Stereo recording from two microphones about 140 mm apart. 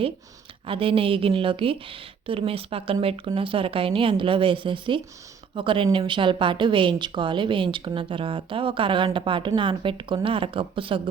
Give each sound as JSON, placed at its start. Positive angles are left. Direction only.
{"t": 0.7, "sound": "a woman's voice", "side_deg": -40}